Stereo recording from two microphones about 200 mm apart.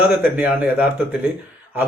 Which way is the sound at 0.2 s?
5° right (ahead or behind).